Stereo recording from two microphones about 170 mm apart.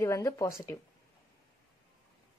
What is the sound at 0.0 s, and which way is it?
Speech, 20° left (ahead or behind).